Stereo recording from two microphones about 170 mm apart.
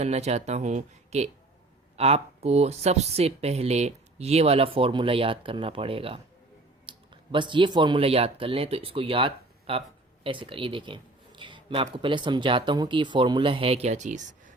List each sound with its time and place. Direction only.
0.0 s speech: 40° right (ahead or behind)